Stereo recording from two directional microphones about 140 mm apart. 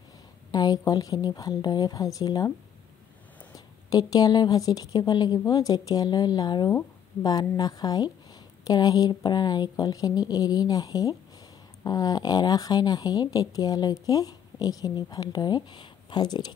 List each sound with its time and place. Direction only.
0.5 s speech: 30° left (ahead or behind)
3.5 s speech: 25° left (ahead or behind)